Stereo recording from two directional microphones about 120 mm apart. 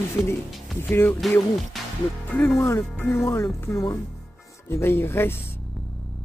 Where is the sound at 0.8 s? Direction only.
20° left (ahead or behind).